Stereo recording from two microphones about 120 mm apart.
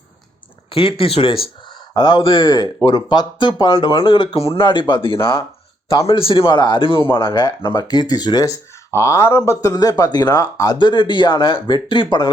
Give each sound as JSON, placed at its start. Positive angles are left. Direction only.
{"t": 0.7, "sound": "a man's voice", "side_deg": 50}